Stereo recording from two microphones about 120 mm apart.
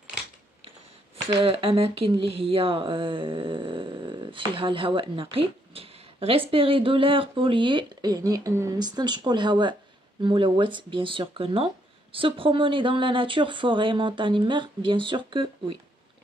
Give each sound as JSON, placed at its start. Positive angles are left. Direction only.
{"t": 1.1, "sound": "speech", "side_deg": -50}